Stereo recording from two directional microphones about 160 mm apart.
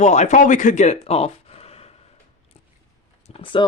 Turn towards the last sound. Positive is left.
turn(degrees=30)  # may be behind; listen again after turning